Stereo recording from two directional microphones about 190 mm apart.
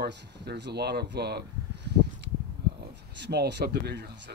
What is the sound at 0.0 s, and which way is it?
Speech, 60° right (ahead or behind).